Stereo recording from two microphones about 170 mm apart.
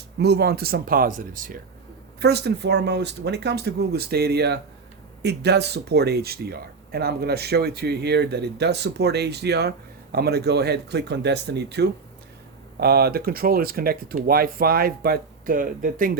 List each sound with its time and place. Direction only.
0.2 s speech: 75° right (ahead or behind); by 1.6 s 55° right (ahead or behind)
2.2 s speech: 80° right; by 16.1 s 55° right (ahead or behind)